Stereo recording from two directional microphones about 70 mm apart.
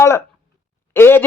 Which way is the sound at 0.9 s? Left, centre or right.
Left.